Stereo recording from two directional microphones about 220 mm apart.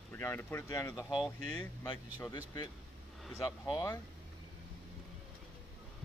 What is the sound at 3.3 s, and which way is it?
Speech, 15° left (ahead or behind).